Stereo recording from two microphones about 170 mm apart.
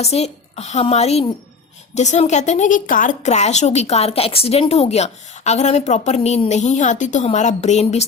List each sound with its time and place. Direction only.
0.0 s a woman's voice: 40° left (ahead or behind)